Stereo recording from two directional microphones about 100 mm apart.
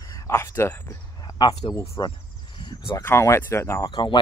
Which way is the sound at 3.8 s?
50° left (ahead or behind).